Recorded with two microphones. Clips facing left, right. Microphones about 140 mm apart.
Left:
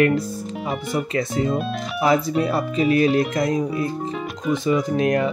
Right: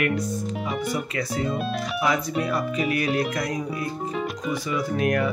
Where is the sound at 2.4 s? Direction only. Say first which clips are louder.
Left 5 dB; 30° left (ahead or behind).